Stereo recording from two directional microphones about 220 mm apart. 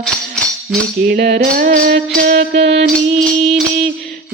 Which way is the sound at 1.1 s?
45° right (ahead or behind).